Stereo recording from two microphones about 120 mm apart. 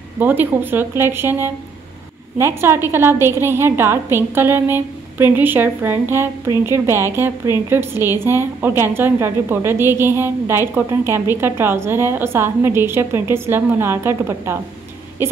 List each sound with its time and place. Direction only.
0.2 s a woman's voice: 15° right (ahead or behind)